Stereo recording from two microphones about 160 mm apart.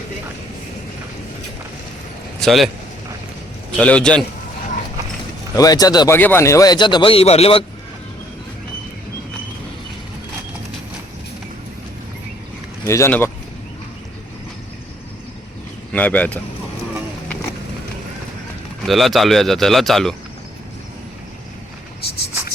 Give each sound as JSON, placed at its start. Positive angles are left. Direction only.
{"t": 2.4, "sound": "speech", "side_deg": 0}
{"t": 3.8, "sound": "speech", "side_deg": 5}
{"t": 5.5, "sound": "a man's voice", "side_deg": 25}
{"t": 6.1, "sound": "a man's voice", "side_deg": 15}
{"t": 12.8, "sound": "speech", "side_deg": 15}
{"t": 15.9, "sound": "speech", "side_deg": 10}
{"t": 18.8, "sound": "speech", "side_deg": 0}